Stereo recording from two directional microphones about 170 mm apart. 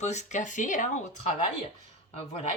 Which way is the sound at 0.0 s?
45° left (ahead or behind).